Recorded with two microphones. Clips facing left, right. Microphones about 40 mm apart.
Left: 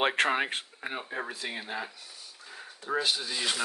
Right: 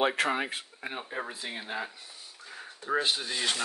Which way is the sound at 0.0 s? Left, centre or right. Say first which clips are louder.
Left 1 dB; left.